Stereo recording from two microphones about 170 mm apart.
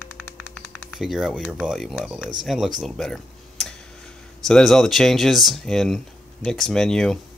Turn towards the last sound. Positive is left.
turn(degrees=5)  # may be behind; listen again after turning